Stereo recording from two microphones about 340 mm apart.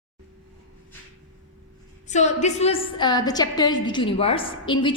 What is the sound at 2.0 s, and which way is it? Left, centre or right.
A woman's voice, centre.